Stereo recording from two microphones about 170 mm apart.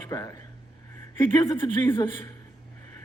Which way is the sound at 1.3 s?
15° left (ahead or behind).